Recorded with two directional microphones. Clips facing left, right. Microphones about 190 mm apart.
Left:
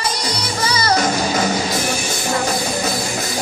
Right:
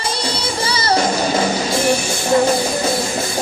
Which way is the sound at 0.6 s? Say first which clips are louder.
Even; 30° right (ahead or behind).